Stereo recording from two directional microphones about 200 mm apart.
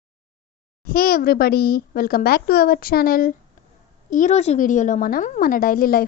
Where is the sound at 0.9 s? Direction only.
45° left (ahead or behind).